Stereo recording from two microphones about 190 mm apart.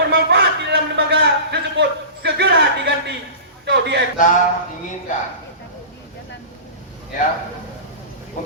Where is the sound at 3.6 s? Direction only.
65° right (ahead or behind).